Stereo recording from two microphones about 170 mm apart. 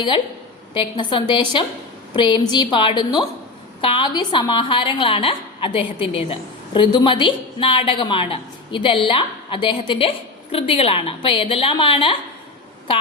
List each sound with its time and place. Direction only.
0.7 s a woman's voice: 30° left (ahead or behind)